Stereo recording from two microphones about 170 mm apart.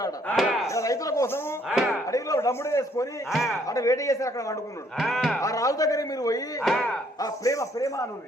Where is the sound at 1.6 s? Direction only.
Centre (ahead or behind).